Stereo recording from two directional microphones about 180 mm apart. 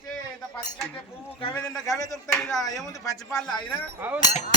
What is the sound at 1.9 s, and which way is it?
Speech, 20° left (ahead or behind).